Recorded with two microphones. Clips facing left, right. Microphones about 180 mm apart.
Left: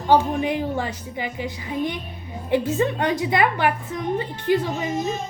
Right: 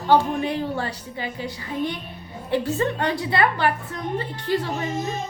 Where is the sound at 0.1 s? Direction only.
15° left (ahead or behind).